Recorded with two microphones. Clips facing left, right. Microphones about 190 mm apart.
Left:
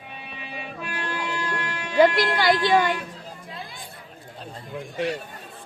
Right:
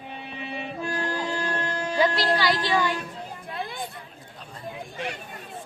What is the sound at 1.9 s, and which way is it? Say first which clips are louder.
Speech: left 5 dB; 55° left (ahead or behind).